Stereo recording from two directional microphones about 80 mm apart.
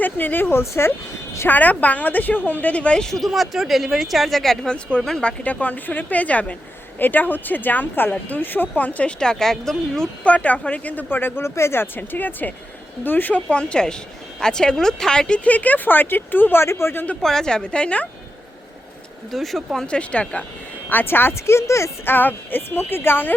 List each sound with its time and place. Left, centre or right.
0.0 s speech: left
1.5 s speech: centre
10.2 s a woman's voice: centre
17.2 s a woman's voice: centre
19.3 s speech: centre
20.0 s a woman's voice: centre
20.9 s speech: left